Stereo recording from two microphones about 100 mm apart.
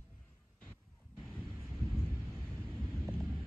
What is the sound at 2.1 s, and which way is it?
Thunder, 20° left (ahead or behind).